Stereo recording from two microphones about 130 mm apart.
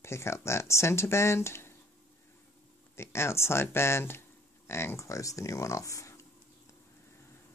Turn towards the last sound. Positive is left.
turn(degrees=25)  # may be behind; listen again after turning